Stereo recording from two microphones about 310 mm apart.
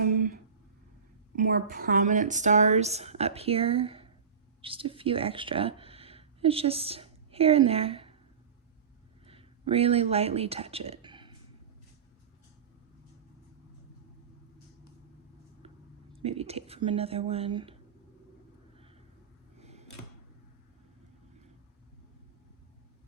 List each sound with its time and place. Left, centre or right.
1.5 s a woman's voice: right
9.2 s speech: centre
16.2 s a woman's voice: centre
19.5 s a sound: right